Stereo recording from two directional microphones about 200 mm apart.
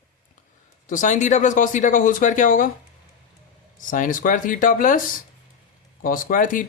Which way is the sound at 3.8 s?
40° left (ahead or behind).